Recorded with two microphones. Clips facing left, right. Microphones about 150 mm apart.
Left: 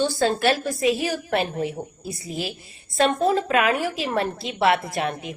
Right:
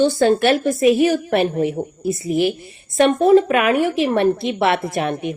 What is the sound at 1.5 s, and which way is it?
A woman's voice, 30° right (ahead or behind).